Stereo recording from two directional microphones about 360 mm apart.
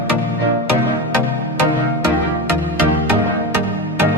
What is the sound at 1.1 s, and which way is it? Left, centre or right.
Music, right.